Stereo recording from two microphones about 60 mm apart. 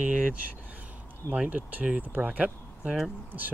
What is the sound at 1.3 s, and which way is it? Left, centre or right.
Speech, right.